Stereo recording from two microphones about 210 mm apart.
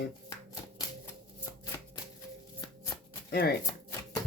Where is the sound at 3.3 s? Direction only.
50° left (ahead or behind).